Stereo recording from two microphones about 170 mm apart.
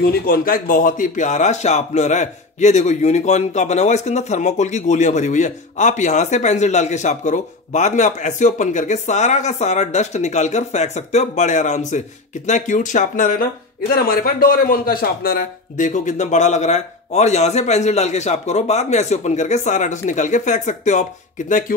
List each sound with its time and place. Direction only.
0.0 s speech: 60° left (ahead or behind)